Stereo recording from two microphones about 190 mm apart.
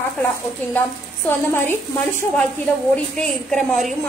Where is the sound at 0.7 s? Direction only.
10° left (ahead or behind).